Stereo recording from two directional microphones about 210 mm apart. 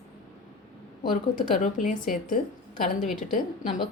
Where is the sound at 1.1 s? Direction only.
40° left (ahead or behind).